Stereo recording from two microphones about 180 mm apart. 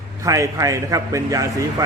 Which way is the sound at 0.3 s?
15° right (ahead or behind).